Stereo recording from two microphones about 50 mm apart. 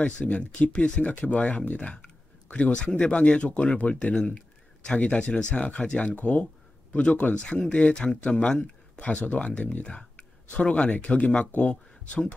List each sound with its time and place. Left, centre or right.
0.0 s speech: left